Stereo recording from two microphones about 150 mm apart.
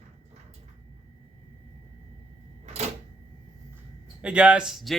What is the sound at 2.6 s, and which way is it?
Cash register, 45° right (ahead or behind).